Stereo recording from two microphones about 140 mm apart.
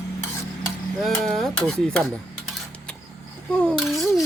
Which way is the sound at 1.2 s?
Centre (ahead or behind).